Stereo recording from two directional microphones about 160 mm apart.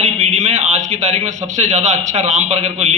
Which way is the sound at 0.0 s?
45° right (ahead or behind).